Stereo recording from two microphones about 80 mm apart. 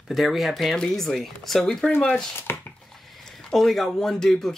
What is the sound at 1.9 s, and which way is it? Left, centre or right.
Speech, centre.